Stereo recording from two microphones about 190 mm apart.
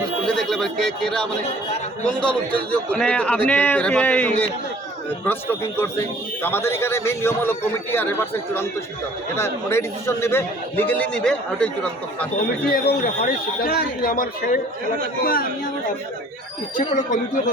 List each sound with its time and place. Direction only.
0.3 s a man's voice: 5° left (ahead or behind)
9.3 s a man's voice: 15° left (ahead or behind)
12.7 s speech: 50° left (ahead or behind)
16.7 s speech: 45° left (ahead or behind)